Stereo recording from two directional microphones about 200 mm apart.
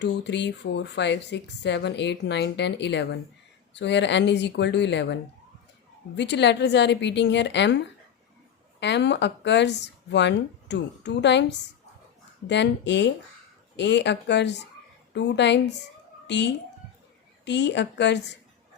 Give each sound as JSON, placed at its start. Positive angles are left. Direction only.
{"t": 0.0, "sound": "speech", "side_deg": 60}
{"t": 8.8, "sound": "a woman's voice", "side_deg": 60}